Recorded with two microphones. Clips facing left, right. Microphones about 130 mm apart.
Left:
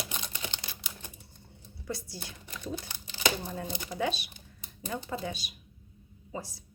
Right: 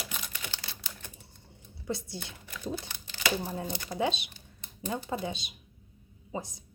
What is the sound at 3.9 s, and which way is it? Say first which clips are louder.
Speech: right 2 dB; 20° right (ahead or behind).